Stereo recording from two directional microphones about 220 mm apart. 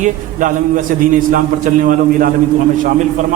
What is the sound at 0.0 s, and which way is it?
Speech, 35° right (ahead or behind).